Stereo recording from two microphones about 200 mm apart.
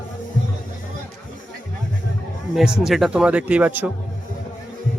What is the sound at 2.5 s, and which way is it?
Speech, centre (ahead or behind).